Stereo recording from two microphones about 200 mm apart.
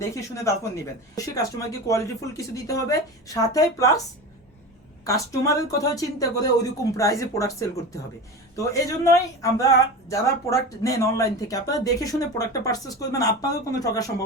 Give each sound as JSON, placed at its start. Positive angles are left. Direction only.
{"t": 0.0, "sound": "speech", "side_deg": 15}
{"t": 5.0, "sound": "speech", "side_deg": 15}